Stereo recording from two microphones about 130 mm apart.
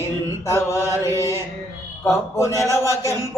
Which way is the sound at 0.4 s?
20° left (ahead or behind).